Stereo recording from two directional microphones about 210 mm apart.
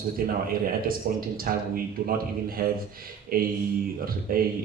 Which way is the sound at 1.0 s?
40° right (ahead or behind).